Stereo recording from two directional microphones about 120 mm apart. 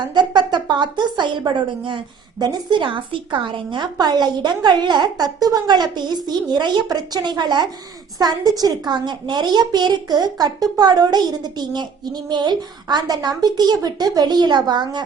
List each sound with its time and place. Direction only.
0.1 s a woman's voice: 40° right (ahead or behind)